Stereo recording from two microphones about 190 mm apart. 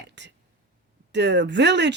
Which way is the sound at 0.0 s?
65° right (ahead or behind).